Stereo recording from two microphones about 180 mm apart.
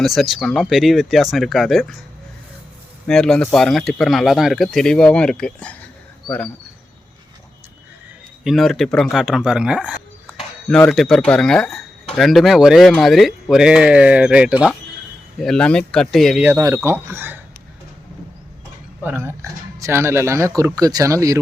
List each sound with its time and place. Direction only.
0.0 s speech: centre (ahead or behind)
3.1 s speech: 5° left (ahead or behind)
8.4 s speech: centre (ahead or behind)
10.7 s speech: 5° left (ahead or behind)
16.5 s speech: 15° right (ahead or behind)
19.0 s speech: 15° right (ahead or behind)